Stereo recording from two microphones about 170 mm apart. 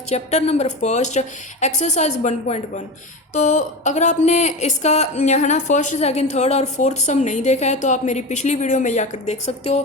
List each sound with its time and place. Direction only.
0.1 s speech: 40° left (ahead or behind)